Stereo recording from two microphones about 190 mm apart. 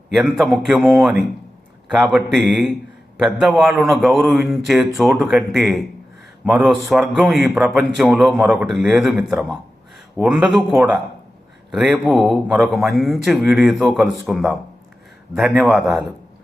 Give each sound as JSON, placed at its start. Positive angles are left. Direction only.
{"t": 0.1, "sound": "a man's voice", "side_deg": 0}